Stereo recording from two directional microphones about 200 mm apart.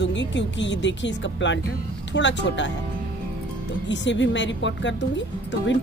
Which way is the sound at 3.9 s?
65° left (ahead or behind).